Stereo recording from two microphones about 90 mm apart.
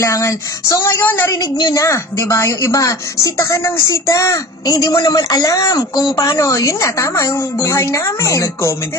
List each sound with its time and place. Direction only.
0.0 s a woman's voice: 35° left (ahead or behind)
1.4 s speech: 55° left (ahead or behind)
1.7 s a woman's voice: 35° left (ahead or behind)